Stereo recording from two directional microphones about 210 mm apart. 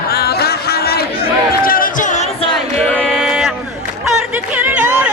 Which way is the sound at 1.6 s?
40° left (ahead or behind).